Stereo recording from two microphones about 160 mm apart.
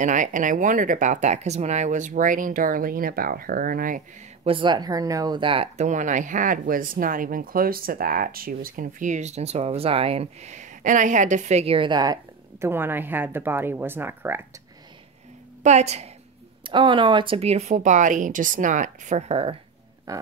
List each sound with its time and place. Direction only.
0.0 s speech: 50° right (ahead or behind)
4.5 s speech: 30° right (ahead or behind); by 14.4 s 15° right (ahead or behind)
15.6 s speech: 45° right (ahead or behind)
16.6 s speech: 30° right (ahead or behind)
20.1 s a sound: 20° right (ahead or behind)